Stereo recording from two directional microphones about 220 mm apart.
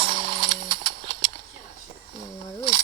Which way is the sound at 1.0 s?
60° right (ahead or behind).